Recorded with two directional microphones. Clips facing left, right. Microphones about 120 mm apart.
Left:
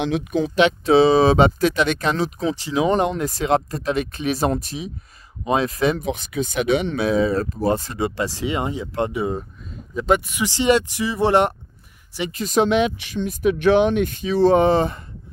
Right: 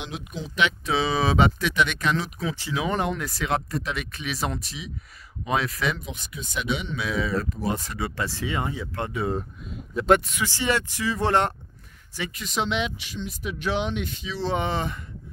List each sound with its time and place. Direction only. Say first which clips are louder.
0.0 s speech: left 13 dB; 65° left (ahead or behind)
0.6 s speech: left 9 dB; 30° left (ahead or behind)
5.4 s speech: left 6 dB; 30° left (ahead or behind)
6.0 s speech: left 13 dB; 75° left (ahead or behind); by 7.1 s 50° left (ahead or behind)
7.1 s speech: left 6 dB; 35° left (ahead or behind)
9.9 s speech: even; 5° left (ahead or behind)
10.3 s speech: left 7 dB; 15° left (ahead or behind)
12.3 s speech: left 10 dB; 40° left (ahead or behind)